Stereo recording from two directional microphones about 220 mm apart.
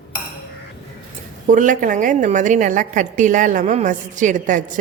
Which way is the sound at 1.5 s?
35° right (ahead or behind).